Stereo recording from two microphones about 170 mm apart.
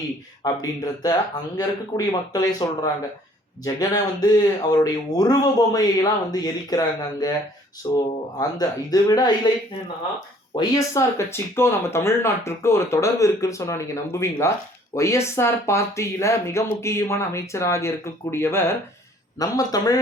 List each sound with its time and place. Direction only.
0.4 s speech: 20° left (ahead or behind)
10.5 s speech: 20° left (ahead or behind)